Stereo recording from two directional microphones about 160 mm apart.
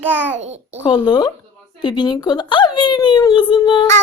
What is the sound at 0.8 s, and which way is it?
A child's voice, 30° left (ahead or behind).